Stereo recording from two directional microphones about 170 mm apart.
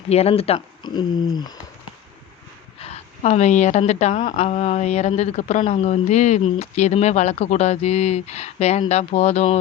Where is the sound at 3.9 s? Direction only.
40° left (ahead or behind).